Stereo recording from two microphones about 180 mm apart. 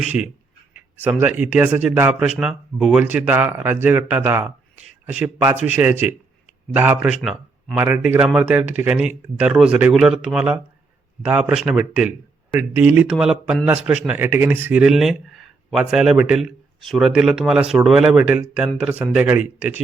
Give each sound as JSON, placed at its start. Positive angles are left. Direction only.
{"t": 0.0, "sound": "speech", "side_deg": -10}